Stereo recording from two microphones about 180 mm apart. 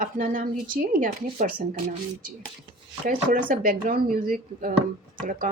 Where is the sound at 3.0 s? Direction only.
50° right (ahead or behind).